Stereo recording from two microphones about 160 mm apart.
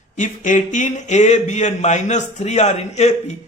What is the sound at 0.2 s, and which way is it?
Speech, 50° left (ahead or behind).